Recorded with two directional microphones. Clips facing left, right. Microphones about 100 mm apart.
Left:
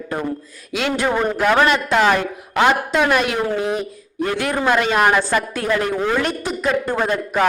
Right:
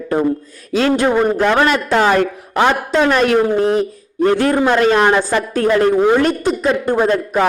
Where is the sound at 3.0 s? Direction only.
40° right (ahead or behind).